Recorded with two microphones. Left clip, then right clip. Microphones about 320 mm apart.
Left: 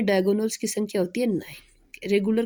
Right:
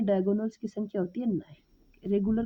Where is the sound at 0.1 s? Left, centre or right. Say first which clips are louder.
Left 6 dB; right.